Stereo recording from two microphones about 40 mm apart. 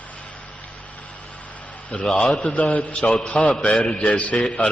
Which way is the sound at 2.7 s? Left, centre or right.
Left.